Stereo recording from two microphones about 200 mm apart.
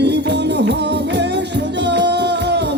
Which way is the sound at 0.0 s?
60° right (ahead or behind).